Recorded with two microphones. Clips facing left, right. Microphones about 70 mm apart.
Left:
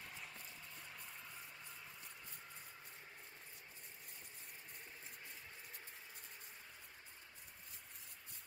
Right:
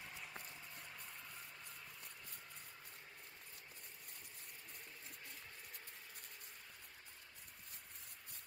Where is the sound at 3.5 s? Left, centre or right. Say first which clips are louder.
Even; right.